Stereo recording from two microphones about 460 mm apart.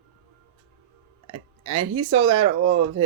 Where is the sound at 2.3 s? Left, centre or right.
Centre.